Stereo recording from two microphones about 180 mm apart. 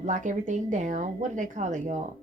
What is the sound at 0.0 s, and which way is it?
A woman's voice, 45° right (ahead or behind).